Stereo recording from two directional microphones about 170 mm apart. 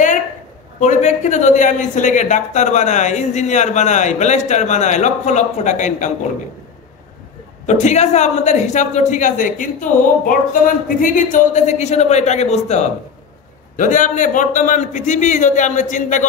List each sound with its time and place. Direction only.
0.7 s speech: 45° left (ahead or behind)
7.6 s speech: 45° left (ahead or behind)